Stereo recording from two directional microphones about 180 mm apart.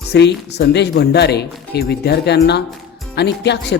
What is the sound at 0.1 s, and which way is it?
Speech, 70° left (ahead or behind).